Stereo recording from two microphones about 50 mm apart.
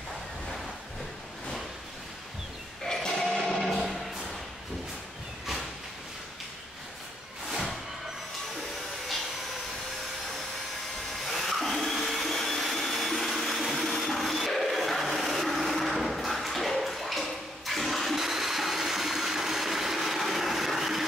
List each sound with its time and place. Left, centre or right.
2.9 s music: centre
11.2 s vacuum cleaner: centre